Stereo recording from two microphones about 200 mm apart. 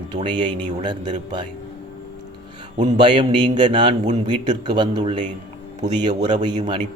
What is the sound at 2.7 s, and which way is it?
Speech, 35° right (ahead or behind).